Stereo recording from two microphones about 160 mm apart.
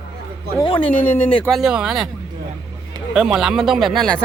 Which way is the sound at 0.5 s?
30° left (ahead or behind).